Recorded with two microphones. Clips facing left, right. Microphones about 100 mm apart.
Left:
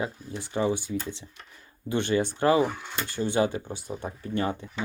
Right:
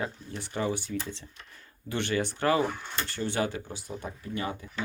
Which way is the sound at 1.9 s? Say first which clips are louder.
Left 4 dB; 20° left (ahead or behind).